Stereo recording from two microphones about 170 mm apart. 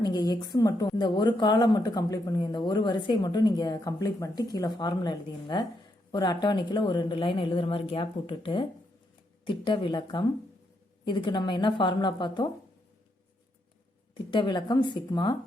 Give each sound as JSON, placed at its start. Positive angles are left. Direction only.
{"t": 0.0, "sound": "a woman's voice", "side_deg": 25}
{"t": 14.1, "sound": "a woman's voice", "side_deg": 30}